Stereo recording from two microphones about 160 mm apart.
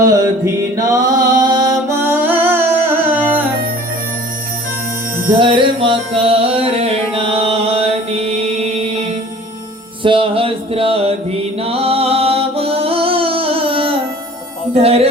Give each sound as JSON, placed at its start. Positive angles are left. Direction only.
{"t": 0.0, "sound": "music", "side_deg": -20}
{"t": 2.0, "sound": "music", "side_deg": -10}
{"t": 5.4, "sound": "music", "side_deg": -30}
{"t": 10.0, "sound": "music", "side_deg": -35}